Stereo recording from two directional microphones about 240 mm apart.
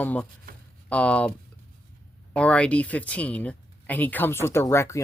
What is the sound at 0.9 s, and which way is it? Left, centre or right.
Speech, centre.